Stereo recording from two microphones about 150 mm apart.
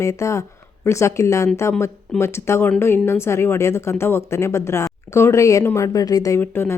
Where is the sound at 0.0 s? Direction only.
20° left (ahead or behind).